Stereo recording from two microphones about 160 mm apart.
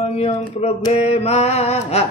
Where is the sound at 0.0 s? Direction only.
40° left (ahead or behind).